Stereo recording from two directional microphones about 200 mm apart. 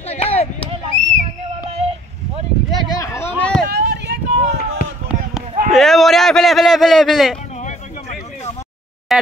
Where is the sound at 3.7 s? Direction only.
55° right (ahead or behind).